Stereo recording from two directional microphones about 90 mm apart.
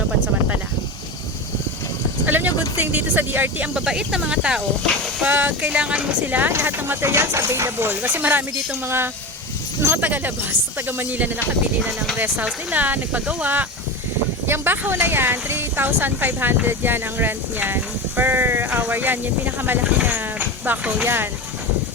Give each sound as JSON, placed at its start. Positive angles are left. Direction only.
{"t": 2.2, "sound": "vehicle", "side_deg": -20}
{"t": 3.8, "sound": "speech", "side_deg": -5}